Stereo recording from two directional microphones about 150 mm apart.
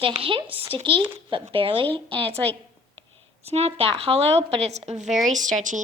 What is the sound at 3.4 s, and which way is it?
A woman's voice, 45° right (ahead or behind).